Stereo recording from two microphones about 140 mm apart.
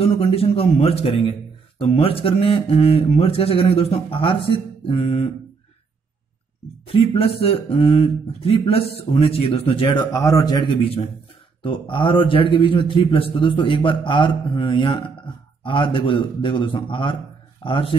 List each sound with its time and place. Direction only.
0.0 s speech: 45° left (ahead or behind)
6.9 s speech: 45° left (ahead or behind)
10.1 s a man's voice: 25° left (ahead or behind)